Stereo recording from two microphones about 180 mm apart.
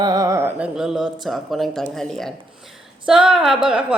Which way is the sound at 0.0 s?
20° right (ahead or behind).